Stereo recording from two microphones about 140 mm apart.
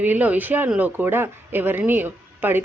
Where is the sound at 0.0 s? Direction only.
10° right (ahead or behind).